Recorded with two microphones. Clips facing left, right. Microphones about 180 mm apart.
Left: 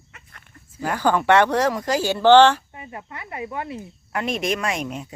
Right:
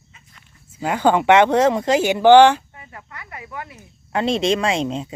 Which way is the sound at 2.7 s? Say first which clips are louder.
Left 4 dB; 20° left (ahead or behind).